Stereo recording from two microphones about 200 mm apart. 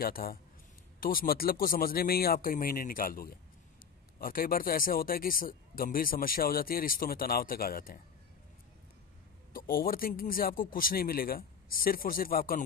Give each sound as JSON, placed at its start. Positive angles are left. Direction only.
{"t": 0.0, "sound": "speech", "side_deg": 45}
{"t": 9.5, "sound": "speech", "side_deg": 45}